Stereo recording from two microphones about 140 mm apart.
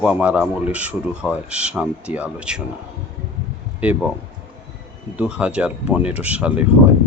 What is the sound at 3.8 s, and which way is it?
Speech, 10° right (ahead or behind).